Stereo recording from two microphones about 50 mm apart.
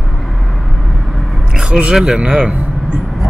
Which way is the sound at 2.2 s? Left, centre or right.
Right.